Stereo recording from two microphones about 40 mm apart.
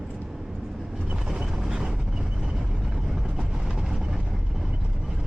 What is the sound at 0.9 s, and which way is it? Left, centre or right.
Vehicle, right.